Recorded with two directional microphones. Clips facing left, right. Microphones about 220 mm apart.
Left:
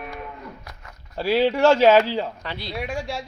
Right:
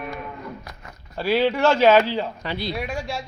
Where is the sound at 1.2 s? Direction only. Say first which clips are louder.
Left 1 dB; 35° left (ahead or behind).